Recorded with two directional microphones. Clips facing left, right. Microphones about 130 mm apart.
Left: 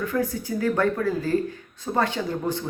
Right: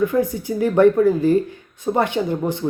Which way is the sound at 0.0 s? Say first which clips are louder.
Right 7 dB; 20° right (ahead or behind).